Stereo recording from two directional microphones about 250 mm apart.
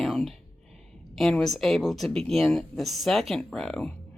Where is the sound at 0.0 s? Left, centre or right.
Centre.